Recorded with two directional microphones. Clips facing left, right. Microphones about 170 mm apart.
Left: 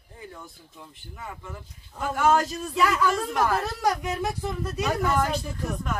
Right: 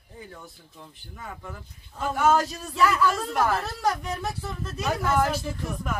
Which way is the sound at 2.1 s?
Centre (ahead or behind).